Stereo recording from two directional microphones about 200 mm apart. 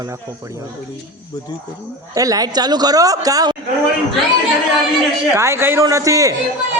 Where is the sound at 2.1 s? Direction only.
15° right (ahead or behind).